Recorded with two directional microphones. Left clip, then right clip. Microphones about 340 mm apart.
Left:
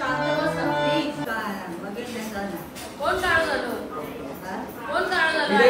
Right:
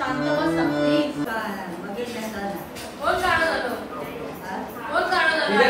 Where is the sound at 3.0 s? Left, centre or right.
Centre.